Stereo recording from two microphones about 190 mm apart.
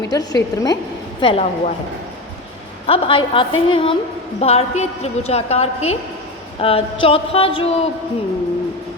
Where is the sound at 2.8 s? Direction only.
30° left (ahead or behind).